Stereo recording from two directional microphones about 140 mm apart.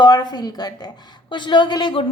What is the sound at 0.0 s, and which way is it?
A woman's voice, 30° left (ahead or behind).